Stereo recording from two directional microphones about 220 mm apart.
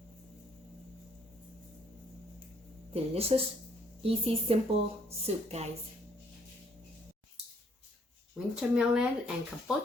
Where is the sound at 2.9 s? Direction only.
25° right (ahead or behind).